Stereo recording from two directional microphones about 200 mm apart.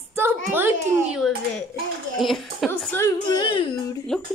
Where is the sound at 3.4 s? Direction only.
25° left (ahead or behind).